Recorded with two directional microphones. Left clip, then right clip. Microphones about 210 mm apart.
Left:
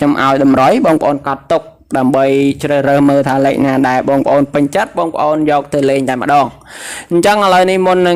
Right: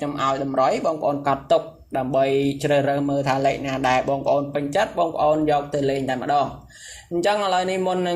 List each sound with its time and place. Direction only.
0.0 s a man's voice: 40° left (ahead or behind)
1.2 s speech: 25° left (ahead or behind)
1.5 s a man's voice: 40° left (ahead or behind)